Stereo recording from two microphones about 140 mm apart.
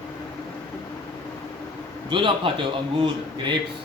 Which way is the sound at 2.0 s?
35° right (ahead or behind).